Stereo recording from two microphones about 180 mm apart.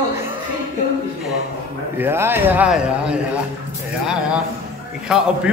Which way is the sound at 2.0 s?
10° right (ahead or behind).